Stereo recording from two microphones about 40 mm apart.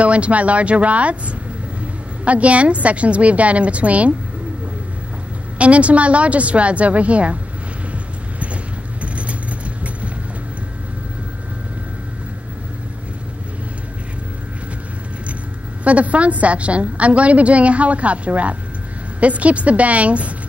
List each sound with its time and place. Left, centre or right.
0.0 s a woman's voice: right
5.6 s a woman's voice: right
9.0 s vehicle: right
15.8 s a woman's voice: right